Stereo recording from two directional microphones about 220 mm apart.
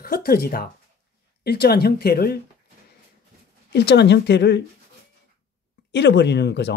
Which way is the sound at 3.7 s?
50° left (ahead or behind).